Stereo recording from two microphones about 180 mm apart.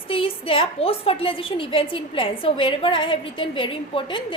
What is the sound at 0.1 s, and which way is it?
A woman's voice, 30° left (ahead or behind).